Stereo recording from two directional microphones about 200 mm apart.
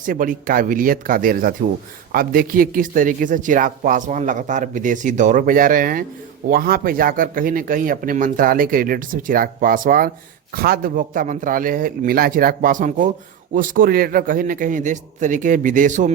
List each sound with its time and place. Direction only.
0.0 s a man's voice: 40° right (ahead or behind)